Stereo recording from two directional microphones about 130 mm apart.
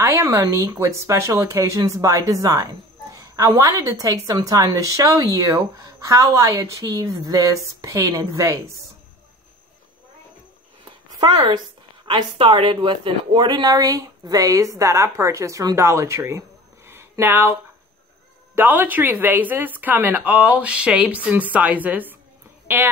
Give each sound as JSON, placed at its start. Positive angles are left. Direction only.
{"t": 0.0, "sound": "speech", "side_deg": -20}
{"t": 11.1, "sound": "speech", "side_deg": -40}